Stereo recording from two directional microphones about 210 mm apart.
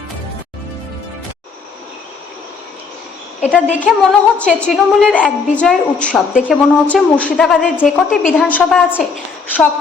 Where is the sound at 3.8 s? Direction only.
5° left (ahead or behind).